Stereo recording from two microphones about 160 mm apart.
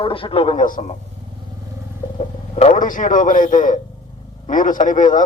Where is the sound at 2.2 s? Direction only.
45° left (ahead or behind).